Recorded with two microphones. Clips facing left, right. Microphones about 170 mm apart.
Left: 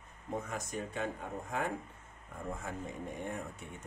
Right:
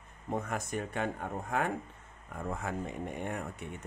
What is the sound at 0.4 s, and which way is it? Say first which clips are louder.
Speech: right 4 dB; 60° right (ahead or behind).